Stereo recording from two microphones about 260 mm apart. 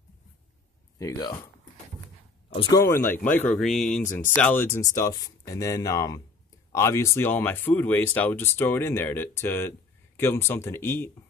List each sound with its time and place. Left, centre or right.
0.9 s speech: centre
2.5 s speech: centre